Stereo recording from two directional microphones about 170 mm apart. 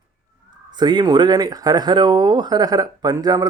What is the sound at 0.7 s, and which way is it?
Speech, 25° right (ahead or behind).